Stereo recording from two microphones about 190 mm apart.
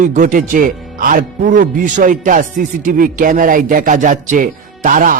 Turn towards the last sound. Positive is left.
turn(degrees=-45)  # may be behind; listen again after turning